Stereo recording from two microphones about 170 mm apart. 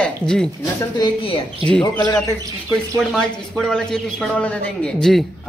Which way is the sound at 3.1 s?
Centre (ahead or behind).